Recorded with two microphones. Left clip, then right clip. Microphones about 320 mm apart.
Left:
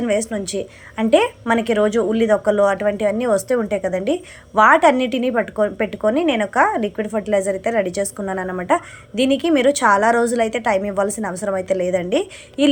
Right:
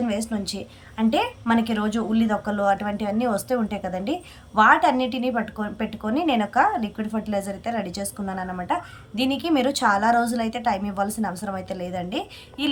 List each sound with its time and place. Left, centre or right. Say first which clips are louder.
0.0 s a woman's voice: left 7 dB; centre